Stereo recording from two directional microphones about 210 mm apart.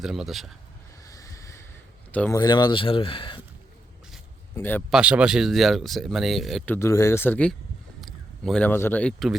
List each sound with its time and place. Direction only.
0.0 s speech: centre (ahead or behind)
1.0 s a sound: 15° left (ahead or behind)
2.1 s speech: 10° left (ahead or behind)
2.4 s speech: 20° left (ahead or behind)
4.5 s speech: 10° left (ahead or behind)
4.9 s speech: 5° right (ahead or behind)
6.7 s speech: 15° left (ahead or behind)